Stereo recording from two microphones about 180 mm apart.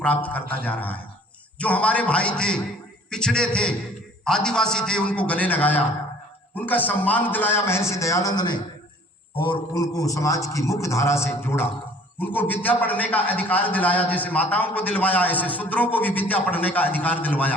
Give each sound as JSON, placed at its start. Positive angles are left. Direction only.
{"t": 0.0, "sound": "a man's voice", "side_deg": 10}